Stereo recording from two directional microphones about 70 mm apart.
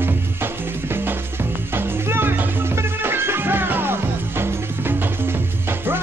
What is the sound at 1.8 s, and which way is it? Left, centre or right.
Music, right.